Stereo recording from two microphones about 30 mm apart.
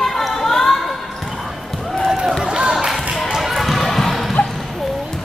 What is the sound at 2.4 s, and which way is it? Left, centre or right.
Music, centre.